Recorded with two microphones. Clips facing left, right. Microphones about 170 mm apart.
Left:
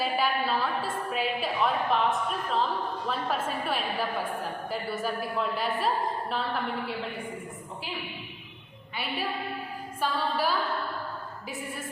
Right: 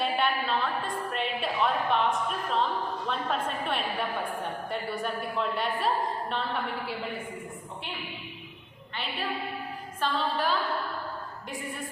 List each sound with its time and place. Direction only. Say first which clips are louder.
0.0 s a woman's voice: even; 5° left (ahead or behind)
10.0 s a woman's voice: even; 10° left (ahead or behind)